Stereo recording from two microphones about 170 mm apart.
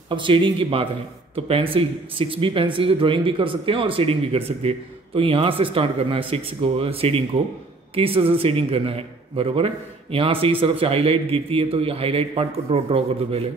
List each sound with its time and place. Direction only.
0.1 s speech: 30° right (ahead or behind)